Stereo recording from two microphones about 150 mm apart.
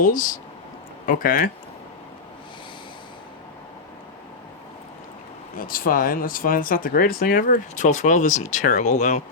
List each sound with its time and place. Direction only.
0.0 s speech: 60° left (ahead or behind)
5.5 s speech: 70° left (ahead or behind); by 9.2 s 55° left (ahead or behind)